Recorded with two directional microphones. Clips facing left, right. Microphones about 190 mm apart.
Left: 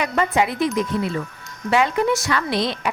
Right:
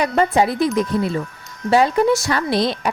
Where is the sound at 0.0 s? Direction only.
35° right (ahead or behind).